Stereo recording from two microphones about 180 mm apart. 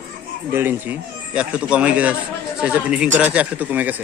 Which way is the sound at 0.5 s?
10° right (ahead or behind).